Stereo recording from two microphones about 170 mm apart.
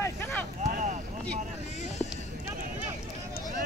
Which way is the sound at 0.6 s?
45° right (ahead or behind).